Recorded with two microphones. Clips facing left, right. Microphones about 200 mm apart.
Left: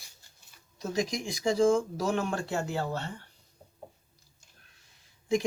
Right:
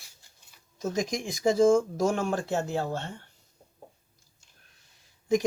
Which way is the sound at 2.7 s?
25° right (ahead or behind).